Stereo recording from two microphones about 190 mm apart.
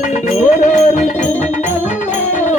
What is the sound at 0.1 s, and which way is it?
Music, 40° left (ahead or behind).